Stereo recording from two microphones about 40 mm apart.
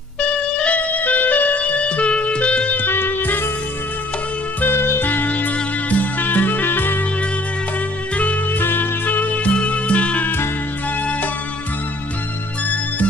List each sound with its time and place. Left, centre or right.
0.2 s music: left
0.7 s music: left
1.6 s music: left
2.9 s music: left
4.6 s music: left
5.0 s music: left
5.3 s music: left
8.5 s music: left
10.2 s music: left